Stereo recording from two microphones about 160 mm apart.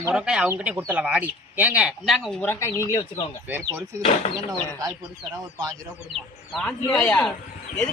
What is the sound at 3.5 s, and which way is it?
Speech, 15° right (ahead or behind).